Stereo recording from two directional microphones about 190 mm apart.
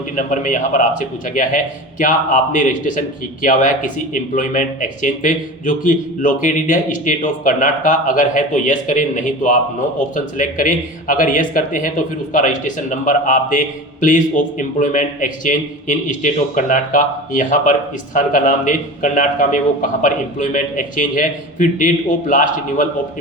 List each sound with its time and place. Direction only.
0.2 s speech: 45° left (ahead or behind)